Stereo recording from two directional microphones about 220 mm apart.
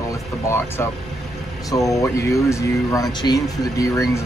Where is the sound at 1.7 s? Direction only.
15° left (ahead or behind).